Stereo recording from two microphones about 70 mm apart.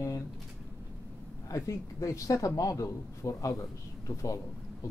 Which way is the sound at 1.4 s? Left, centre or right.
Left.